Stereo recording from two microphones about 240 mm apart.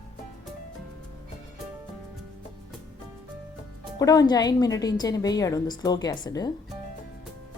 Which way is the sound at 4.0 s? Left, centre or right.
Centre.